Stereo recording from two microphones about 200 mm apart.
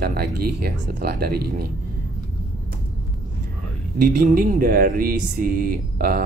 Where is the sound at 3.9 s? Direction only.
45° right (ahead or behind).